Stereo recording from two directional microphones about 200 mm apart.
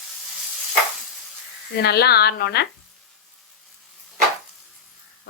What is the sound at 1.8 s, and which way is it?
Speech, 55° left (ahead or behind).